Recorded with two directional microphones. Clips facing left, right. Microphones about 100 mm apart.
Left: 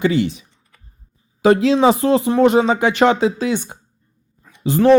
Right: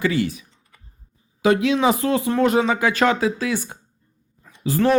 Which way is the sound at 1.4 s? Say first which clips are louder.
Left 5 dB; 35° left (ahead or behind).